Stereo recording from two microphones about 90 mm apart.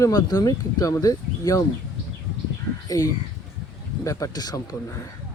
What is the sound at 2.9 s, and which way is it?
Speech, 40° left (ahead or behind).